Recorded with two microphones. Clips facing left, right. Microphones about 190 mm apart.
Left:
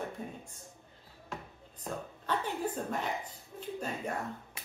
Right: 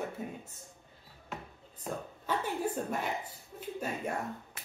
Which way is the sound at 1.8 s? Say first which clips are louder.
Right 1 dB; 10° right (ahead or behind).